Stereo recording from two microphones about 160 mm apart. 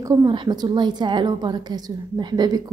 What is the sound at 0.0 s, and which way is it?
A woman's voice, 20° right (ahead or behind).